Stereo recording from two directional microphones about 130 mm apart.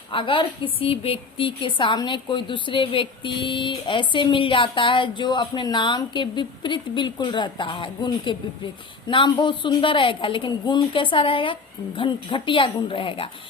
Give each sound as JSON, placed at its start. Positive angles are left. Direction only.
{"t": 0.1, "sound": "a woman's voice", "side_deg": 40}